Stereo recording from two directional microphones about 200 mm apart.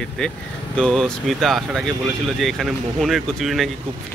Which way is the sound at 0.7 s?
5° left (ahead or behind).